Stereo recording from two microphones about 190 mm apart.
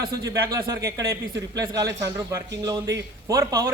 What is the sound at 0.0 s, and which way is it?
A man's voice, 20° right (ahead or behind).